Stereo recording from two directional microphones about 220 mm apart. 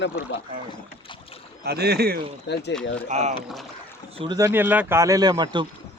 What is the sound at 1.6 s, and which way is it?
Speech, 45° right (ahead or behind).